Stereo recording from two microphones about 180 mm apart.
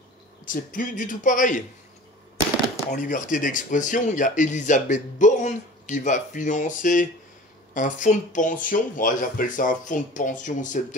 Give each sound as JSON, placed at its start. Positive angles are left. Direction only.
{"t": 0.5, "sound": "speech", "side_deg": 50}
{"t": 2.9, "sound": "speech", "side_deg": 45}